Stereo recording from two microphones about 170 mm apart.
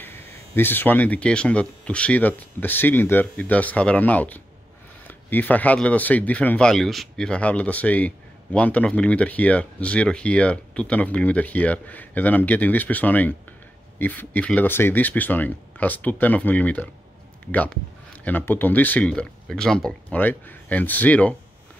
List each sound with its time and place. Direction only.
0.0 s speech: 10° left (ahead or behind)
18.2 s speech: 10° left (ahead or behind)